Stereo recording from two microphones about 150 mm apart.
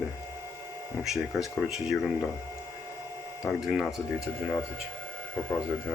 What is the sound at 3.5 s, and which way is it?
Speech, 5° right (ahead or behind).